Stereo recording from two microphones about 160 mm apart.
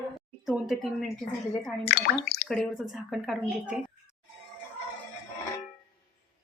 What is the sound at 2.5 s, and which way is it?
Speech, centre (ahead or behind).